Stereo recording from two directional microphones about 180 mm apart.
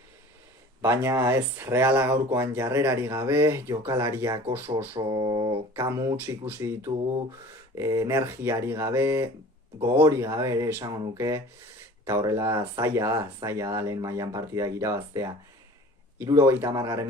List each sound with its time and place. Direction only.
0.8 s speech: 15° right (ahead or behind)
4.9 s a sound: 25° right (ahead or behind)
5.7 s speech: 15° right (ahead or behind)